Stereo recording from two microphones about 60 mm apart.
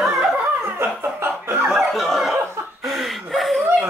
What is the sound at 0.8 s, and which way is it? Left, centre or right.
Chuckle, right.